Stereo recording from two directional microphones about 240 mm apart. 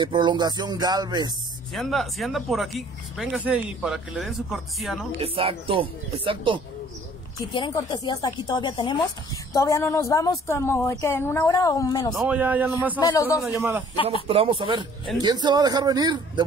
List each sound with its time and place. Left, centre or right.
0.0 s speech: centre
1.7 s speech: centre
5.2 s speech: right
7.5 s a woman's voice: centre
12.1 s speech: centre
13.0 s a woman's voice: centre
13.6 s speech: centre
14.2 s speech: right